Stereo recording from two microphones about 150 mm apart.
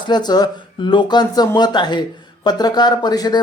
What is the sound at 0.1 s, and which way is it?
Speech, 25° left (ahead or behind).